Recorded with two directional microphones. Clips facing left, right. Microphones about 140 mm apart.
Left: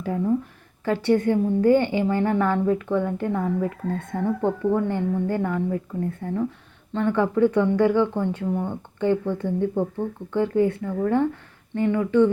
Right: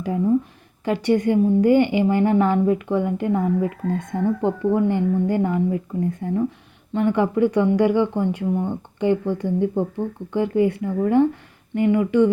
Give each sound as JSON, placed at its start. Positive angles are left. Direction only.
{"t": 0.9, "sound": "a woman's voice", "side_deg": -15}